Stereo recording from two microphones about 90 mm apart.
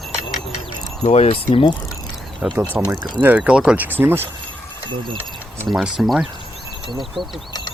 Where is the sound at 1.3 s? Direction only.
90° left.